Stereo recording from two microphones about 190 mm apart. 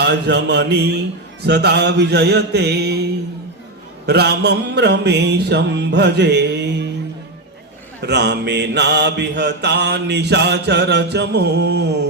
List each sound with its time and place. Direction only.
0.0 s mantra: 65° right (ahead or behind)
8.0 s mantra: 65° right (ahead or behind)